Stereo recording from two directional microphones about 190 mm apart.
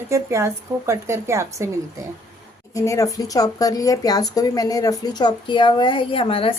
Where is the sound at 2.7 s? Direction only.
15° left (ahead or behind).